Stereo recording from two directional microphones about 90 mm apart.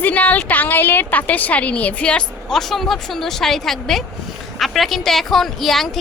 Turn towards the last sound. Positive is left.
turn(degrees=5)  # may be behind; listen again after turning